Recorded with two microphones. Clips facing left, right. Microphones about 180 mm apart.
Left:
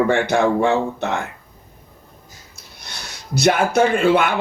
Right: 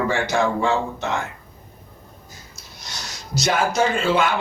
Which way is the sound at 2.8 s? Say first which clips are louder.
Right 1 dB; 60° left (ahead or behind).